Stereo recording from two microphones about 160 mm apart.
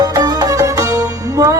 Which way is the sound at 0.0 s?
25° right (ahead or behind).